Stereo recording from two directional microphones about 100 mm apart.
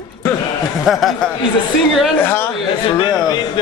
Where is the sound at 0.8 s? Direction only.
Centre (ahead or behind).